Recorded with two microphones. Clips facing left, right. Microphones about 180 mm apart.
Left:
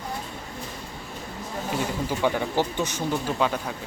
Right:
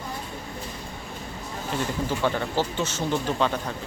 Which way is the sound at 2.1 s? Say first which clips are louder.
Left 3 dB; 10° left (ahead or behind).